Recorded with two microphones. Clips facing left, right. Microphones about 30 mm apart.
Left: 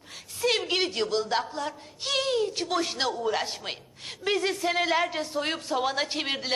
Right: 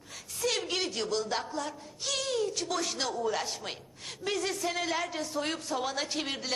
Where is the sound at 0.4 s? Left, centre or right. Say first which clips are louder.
Left 5 dB; left.